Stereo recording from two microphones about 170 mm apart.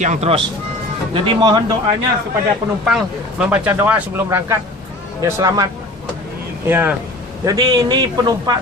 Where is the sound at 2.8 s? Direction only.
5° right (ahead or behind); by 5.6 s 20° right (ahead or behind).